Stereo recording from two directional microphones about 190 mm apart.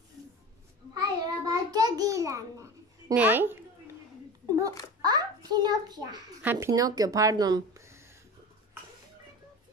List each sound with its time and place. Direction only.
0.9 s child singing: 20° right (ahead or behind)
5.0 s a sound: 20° right (ahead or behind)
6.4 s speech: 15° right (ahead or behind)